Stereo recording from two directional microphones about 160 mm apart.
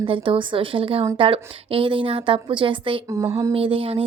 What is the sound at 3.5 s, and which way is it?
Speech, 35° right (ahead or behind).